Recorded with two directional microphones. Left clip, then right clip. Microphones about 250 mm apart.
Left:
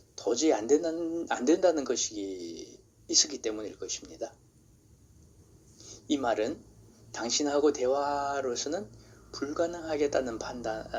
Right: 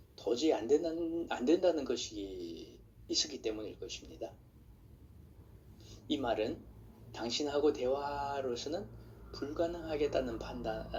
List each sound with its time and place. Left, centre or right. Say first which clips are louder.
0.2 s speech: left 5 dB; left
5.7 s a sound: left 6 dB; left
7.1 s speech: left 6 dB; left